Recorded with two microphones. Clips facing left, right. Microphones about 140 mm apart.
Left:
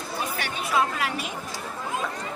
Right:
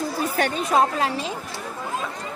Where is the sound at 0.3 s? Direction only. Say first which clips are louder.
Right 6 dB; 45° right (ahead or behind).